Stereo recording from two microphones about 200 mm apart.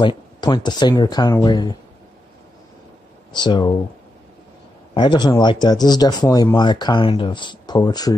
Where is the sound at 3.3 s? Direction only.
20° left (ahead or behind).